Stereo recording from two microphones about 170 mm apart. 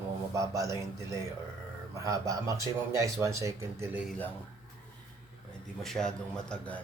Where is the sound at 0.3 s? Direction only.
20° right (ahead or behind).